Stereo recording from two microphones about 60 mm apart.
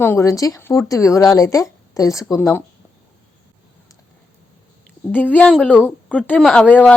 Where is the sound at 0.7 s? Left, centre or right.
Left.